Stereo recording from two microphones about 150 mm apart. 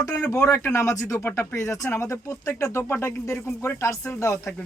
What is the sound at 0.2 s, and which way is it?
Speech, 15° left (ahead or behind).